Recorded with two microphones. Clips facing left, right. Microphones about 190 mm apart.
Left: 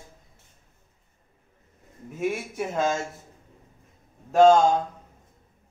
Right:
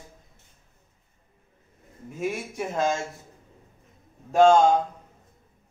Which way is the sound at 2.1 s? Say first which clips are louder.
Left 2 dB; centre (ahead or behind).